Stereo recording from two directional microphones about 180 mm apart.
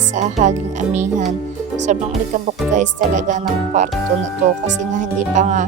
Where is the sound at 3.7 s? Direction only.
40° right (ahead or behind).